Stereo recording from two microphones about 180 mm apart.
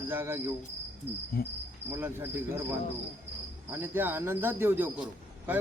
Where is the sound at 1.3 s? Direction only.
55° left (ahead or behind).